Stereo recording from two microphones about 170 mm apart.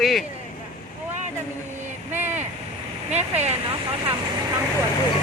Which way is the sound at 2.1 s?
10° right (ahead or behind).